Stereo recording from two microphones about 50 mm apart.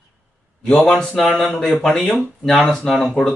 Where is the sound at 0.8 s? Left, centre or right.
Centre.